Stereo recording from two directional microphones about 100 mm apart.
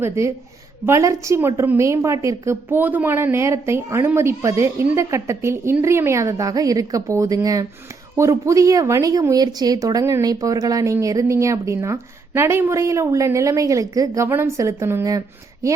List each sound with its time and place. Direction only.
0.9 s a woman's voice: 30° right (ahead or behind)